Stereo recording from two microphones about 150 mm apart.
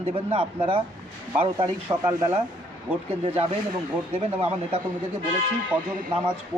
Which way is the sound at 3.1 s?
40° right (ahead or behind).